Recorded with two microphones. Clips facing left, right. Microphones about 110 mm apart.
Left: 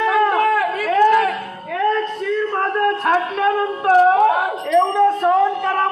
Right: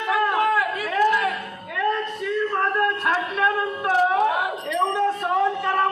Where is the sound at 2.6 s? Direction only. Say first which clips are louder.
Left 4 dB; 35° left (ahead or behind).